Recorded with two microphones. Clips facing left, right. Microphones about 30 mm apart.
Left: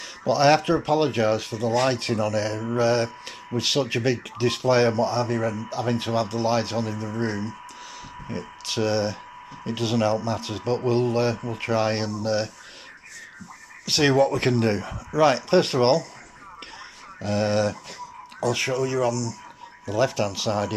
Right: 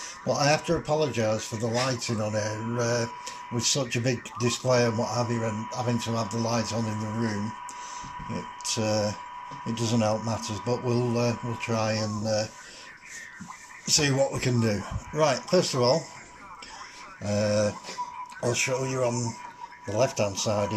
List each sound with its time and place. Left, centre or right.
0.2 s speech: left
2.0 s speech: left
13.8 s speech: left
17.2 s speech: left